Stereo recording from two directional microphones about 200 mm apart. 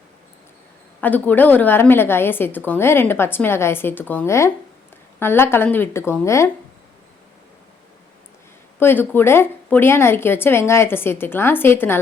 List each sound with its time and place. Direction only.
1.0 s a woman's voice: 10° left (ahead or behind)
8.8 s a woman's voice: 10° left (ahead or behind)